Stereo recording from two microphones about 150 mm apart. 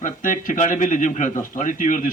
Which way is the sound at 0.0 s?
60° left (ahead or behind).